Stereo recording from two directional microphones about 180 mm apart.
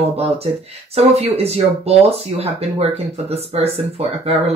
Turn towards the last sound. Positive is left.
turn(degrees=-35)  # may be behind; listen again after turning